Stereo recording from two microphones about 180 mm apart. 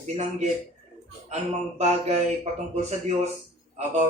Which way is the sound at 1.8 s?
35° right (ahead or behind).